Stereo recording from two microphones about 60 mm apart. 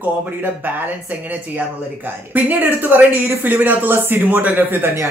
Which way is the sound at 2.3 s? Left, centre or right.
Right.